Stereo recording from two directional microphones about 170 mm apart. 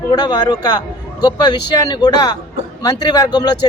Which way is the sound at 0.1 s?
25° left (ahead or behind).